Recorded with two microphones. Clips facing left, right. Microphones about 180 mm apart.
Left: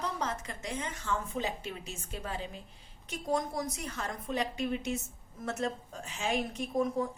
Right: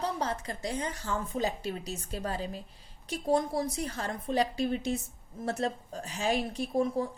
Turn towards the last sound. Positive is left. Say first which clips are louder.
# right 2 dB
turn(degrees=-35)  # may be behind; listen again after turning